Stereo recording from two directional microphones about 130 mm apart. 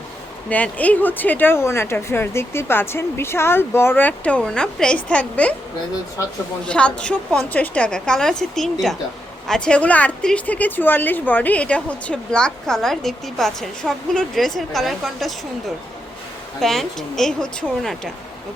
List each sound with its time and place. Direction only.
0.5 s a woman's voice: 10° left (ahead or behind)
6.7 s a woman's voice: 10° left (ahead or behind)
16.6 s speech: centre (ahead or behind)